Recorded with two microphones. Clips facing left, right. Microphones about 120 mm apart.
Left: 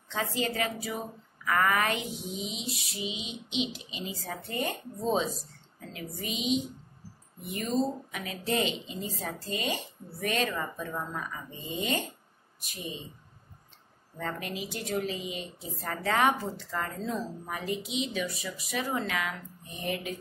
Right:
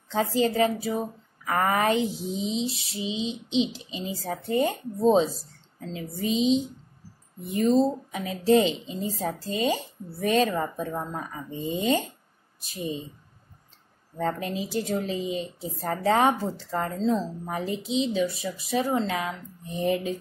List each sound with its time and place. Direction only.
0.1 s speech: 35° right (ahead or behind)
12.6 s speech: 30° right (ahead or behind)
14.1 s speech: 35° right (ahead or behind)